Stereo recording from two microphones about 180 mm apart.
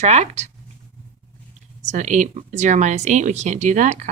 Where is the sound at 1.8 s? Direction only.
40° right (ahead or behind).